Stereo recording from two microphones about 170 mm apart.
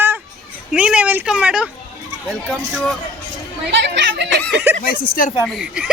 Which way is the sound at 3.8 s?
90° right.